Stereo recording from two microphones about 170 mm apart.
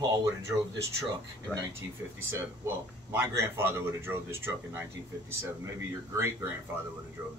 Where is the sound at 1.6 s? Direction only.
15° right (ahead or behind).